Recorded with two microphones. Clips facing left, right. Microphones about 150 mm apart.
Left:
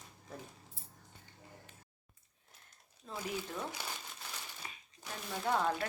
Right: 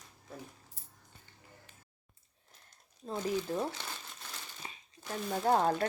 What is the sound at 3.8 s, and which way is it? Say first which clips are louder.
Speech: even; 10° left (ahead or behind).